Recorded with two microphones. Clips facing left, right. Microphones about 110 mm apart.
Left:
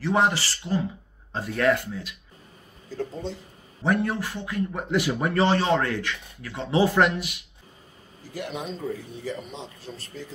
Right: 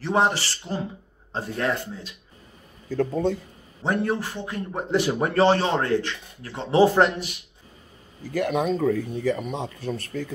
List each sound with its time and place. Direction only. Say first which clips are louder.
0.0 s speech: right 1 dB; 30° right (ahead or behind)
2.9 s speech: right 8 dB; 50° right (ahead or behind)
3.8 s a man's voice: even; 30° right (ahead or behind)
8.3 s a man's voice: right 10 dB; 55° right (ahead or behind)